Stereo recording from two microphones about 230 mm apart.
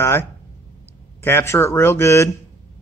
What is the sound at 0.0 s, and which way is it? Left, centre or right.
Speech, centre.